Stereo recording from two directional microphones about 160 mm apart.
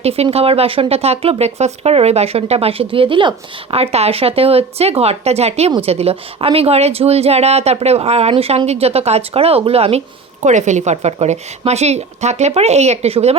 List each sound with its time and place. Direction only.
0.0 s a woman's voice: 40° right (ahead or behind)